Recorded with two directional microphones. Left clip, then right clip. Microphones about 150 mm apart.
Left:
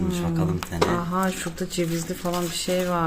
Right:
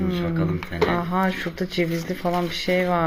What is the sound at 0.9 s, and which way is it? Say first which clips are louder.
Speech: right 2 dB; centre (ahead or behind).